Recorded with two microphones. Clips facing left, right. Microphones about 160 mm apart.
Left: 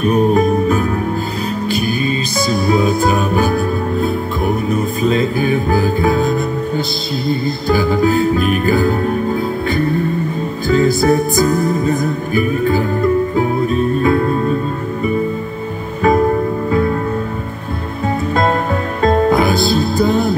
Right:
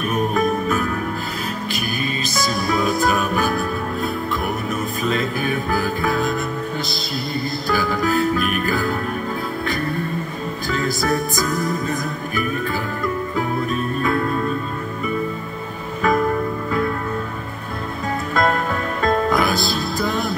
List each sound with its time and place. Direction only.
0.0 s music: 30° left (ahead or behind)
2.6 s music: 25° left (ahead or behind)
7.6 s music: 25° left (ahead or behind)
10.7 s music: 25° left (ahead or behind)
16.0 s music: 30° left (ahead or behind)
18.3 s music: 25° left (ahead or behind)